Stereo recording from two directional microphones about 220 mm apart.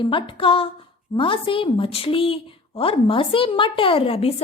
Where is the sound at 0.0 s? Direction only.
25° left (ahead or behind).